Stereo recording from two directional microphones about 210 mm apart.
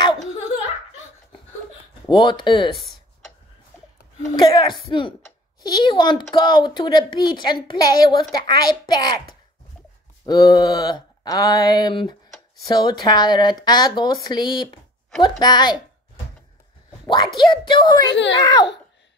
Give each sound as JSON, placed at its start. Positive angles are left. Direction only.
{"t": 2.0, "sound": "a woman's voice", "side_deg": 20}
{"t": 2.7, "sound": "a sound", "side_deg": 0}
{"t": 4.4, "sound": "a woman's voice", "side_deg": 20}
{"t": 10.2, "sound": "a woman's voice", "side_deg": 20}
{"t": 17.0, "sound": "a child's voice", "side_deg": 20}
{"t": 18.1, "sound": "a child's voice", "side_deg": 55}